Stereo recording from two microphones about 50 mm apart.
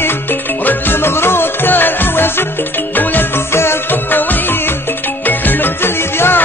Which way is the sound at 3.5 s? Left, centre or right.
Left.